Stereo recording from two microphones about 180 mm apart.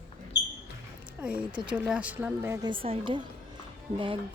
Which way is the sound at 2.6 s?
30° right (ahead or behind).